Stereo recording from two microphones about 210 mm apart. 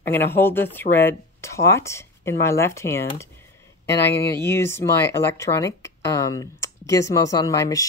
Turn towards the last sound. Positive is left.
turn(degrees=15)  # may be behind; listen again after turning